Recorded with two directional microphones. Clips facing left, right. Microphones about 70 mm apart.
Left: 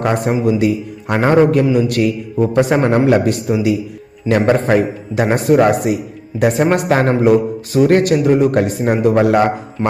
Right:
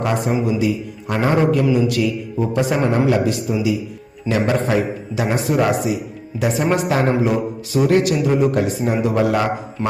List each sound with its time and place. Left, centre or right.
0.0 s a man's voice: left
9.8 s speech: left